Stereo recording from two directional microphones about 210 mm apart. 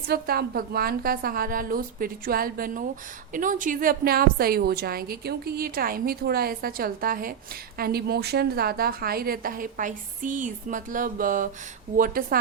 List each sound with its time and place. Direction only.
0.1 s a woman's voice: 45° right (ahead or behind)